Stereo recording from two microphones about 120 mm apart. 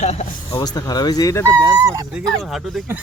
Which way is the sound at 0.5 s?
35° left (ahead or behind).